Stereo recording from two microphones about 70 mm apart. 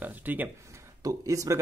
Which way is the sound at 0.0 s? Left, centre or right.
Right.